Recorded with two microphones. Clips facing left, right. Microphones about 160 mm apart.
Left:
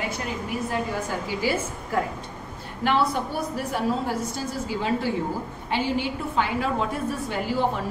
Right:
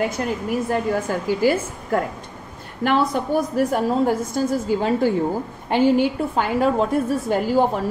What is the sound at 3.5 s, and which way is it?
A woman's voice, 50° right (ahead or behind).